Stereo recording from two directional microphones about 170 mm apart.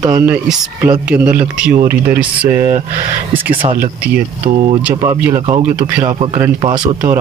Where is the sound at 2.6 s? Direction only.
45° right (ahead or behind).